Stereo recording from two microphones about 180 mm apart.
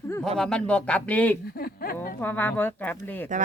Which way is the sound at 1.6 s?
55° left (ahead or behind).